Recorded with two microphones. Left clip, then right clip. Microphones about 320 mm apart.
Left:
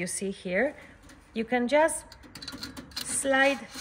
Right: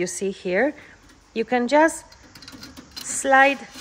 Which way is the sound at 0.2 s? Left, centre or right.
Right.